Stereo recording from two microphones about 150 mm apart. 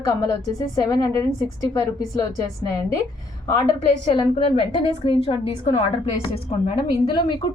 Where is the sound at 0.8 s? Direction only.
25° left (ahead or behind).